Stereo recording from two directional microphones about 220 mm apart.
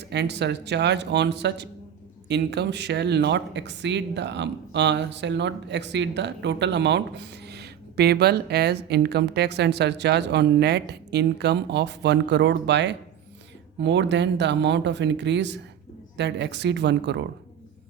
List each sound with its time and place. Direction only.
0.1 s speech: 50° right (ahead or behind)